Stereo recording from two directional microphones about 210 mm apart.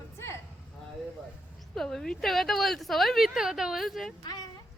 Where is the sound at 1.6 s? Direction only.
Centre (ahead or behind).